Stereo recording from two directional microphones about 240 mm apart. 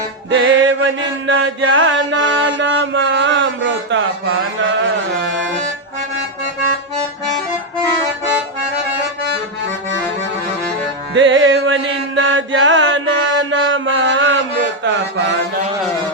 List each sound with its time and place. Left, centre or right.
0.3 s music: right
1.3 s mantra: right
11.1 s music: right